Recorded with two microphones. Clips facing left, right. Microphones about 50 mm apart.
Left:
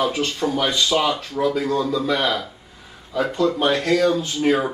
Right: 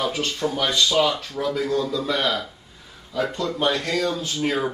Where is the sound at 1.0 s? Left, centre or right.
Left.